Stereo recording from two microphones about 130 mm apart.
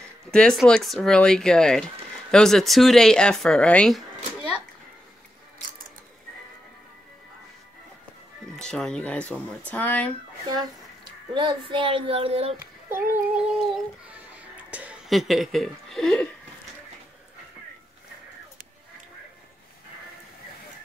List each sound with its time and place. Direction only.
0.3 s speech: 5° left (ahead or behind)
8.5 s speech: 5° left (ahead or behind)
10.4 s speech: 35° right (ahead or behind)
11.3 s child singing: 40° right (ahead or behind)
12.9 s child singing: 15° right (ahead or behind)
13.4 s speech: 5° right (ahead or behind)
14.7 s a sound: 10° right (ahead or behind)
15.0 s speech: centre (ahead or behind)